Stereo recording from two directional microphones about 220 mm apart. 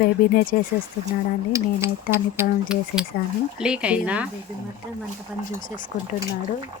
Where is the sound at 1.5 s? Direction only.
10° right (ahead or behind).